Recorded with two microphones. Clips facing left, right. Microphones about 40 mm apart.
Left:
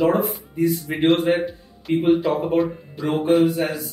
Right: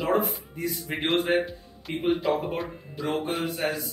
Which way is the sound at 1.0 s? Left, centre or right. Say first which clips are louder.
Left 6 dB; centre.